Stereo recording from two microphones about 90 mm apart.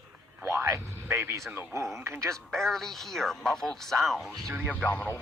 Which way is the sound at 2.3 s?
5° left (ahead or behind).